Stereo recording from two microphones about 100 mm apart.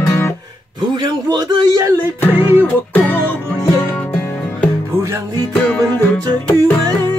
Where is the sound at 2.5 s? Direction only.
20° left (ahead or behind).